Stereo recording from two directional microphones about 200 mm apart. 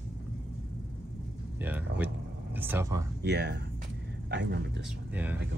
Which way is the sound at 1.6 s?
10° right (ahead or behind).